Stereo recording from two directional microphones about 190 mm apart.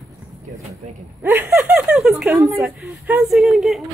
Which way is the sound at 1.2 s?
10° right (ahead or behind).